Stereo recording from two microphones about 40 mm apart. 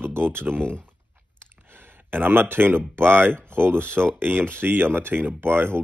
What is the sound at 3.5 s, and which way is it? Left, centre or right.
Speech, right.